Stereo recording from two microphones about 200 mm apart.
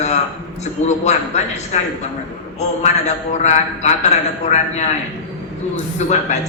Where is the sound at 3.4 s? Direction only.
35° left (ahead or behind).